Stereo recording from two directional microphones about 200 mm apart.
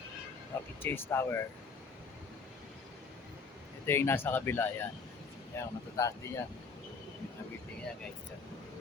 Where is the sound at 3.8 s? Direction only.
10° left (ahead or behind).